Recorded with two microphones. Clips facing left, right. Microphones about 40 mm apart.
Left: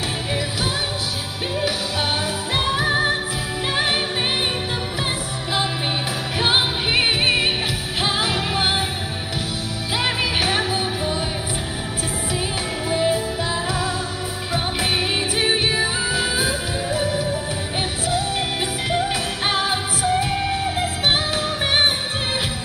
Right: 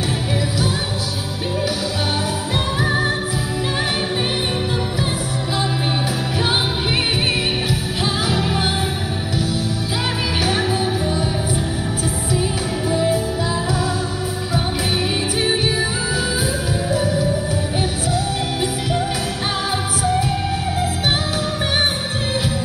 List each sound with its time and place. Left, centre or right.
2.8 s music: left
6.4 s music: left
10.7 s music: left
12.4 s music: left
15.3 s music: left
18.6 s music: left